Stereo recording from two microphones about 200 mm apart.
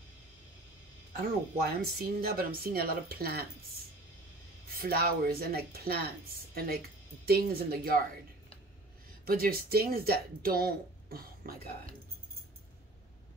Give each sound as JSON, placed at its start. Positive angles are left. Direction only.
{"t": 1.1, "sound": "speech", "side_deg": -50}
{"t": 4.6, "sound": "speech", "side_deg": -50}
{"t": 9.2, "sound": "speech", "side_deg": -45}